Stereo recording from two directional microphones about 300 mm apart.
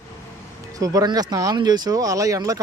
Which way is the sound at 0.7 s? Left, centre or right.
Centre.